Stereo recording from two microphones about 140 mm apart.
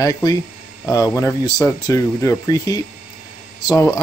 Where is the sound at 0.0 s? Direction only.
25° left (ahead or behind).